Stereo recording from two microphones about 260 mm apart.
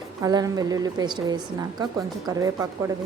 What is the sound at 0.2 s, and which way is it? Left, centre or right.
A woman's voice, centre.